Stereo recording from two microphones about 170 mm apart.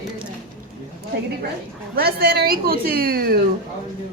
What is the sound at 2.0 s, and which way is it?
Speech, 65° right (ahead or behind).